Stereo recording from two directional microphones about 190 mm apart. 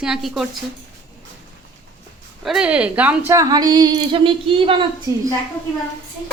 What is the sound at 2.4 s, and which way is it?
A woman's voice, 5° right (ahead or behind).